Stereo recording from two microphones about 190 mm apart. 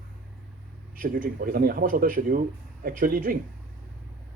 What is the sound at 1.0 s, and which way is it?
Speech, 45° right (ahead or behind).